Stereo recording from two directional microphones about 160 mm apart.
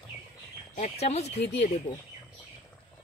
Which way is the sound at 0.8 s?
40° left (ahead or behind).